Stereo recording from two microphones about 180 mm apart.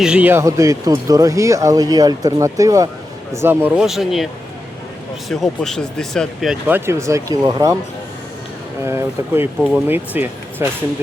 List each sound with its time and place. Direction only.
0.0 s speech: 5° right (ahead or behind)
5.3 s speech: centre (ahead or behind); by 7.8 s 20° right (ahead or behind)
8.8 s speech: 15° right (ahead or behind)